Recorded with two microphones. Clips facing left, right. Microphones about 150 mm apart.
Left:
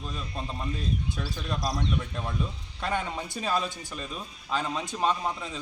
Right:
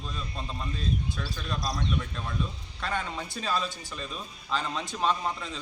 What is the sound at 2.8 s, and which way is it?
Speech, 15° left (ahead or behind).